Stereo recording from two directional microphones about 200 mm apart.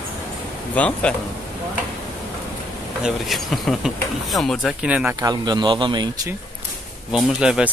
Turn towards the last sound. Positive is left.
turn(degrees=-5)  # may be behind; listen again after turning